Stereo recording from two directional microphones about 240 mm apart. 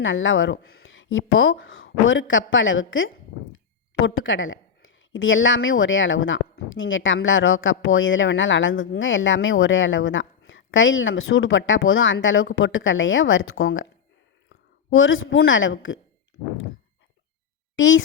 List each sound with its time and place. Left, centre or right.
0.0 s a woman's voice: left
17.7 s a woman's voice: left